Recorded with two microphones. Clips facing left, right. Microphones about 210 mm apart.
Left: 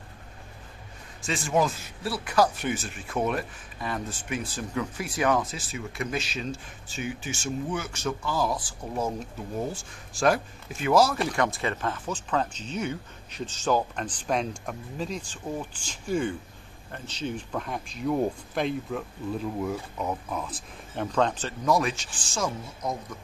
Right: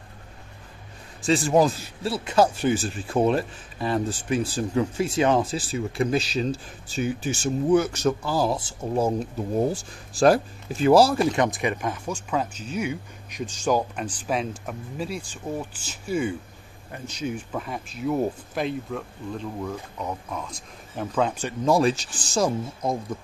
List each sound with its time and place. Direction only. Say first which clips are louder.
1.2 s speech: right 6 dB; 35° right (ahead or behind); by 21.5 s 10° right (ahead or behind)
21.6 s speech: right 5 dB; 30° right (ahead or behind)